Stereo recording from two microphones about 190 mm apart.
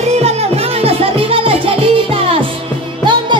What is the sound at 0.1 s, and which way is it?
Music, 35° right (ahead or behind).